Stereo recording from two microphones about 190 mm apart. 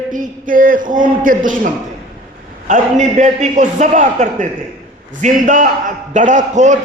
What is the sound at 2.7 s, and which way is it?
A man's voice, 40° right (ahead or behind).